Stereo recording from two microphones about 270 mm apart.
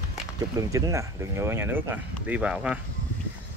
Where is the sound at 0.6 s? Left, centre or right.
Centre.